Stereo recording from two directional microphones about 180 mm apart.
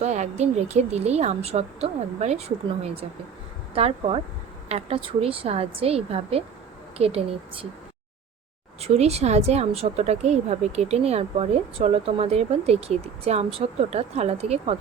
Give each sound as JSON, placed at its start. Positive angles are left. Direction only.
{"t": 0.0, "sound": "a woman's voice", "side_deg": -40}
{"t": 3.8, "sound": "a woman's voice", "side_deg": -35}
{"t": 8.8, "sound": "a woman's voice", "side_deg": -35}